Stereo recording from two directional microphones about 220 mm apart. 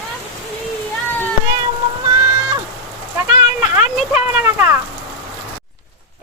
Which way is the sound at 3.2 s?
35° left (ahead or behind).